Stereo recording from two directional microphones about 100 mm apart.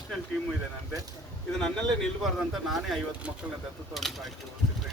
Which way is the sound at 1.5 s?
5° left (ahead or behind).